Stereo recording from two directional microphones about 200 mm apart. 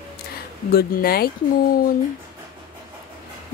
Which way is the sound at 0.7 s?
50° left (ahead or behind).